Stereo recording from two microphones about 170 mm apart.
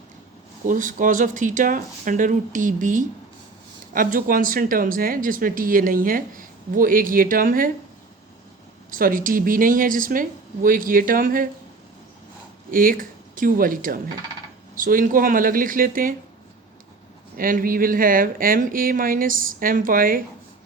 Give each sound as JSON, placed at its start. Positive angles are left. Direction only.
{"t": 0.7, "sound": "speech", "side_deg": -50}
{"t": 8.9, "sound": "speech", "side_deg": -55}
{"t": 12.7, "sound": "speech", "side_deg": -55}
{"t": 17.3, "sound": "speech", "side_deg": -55}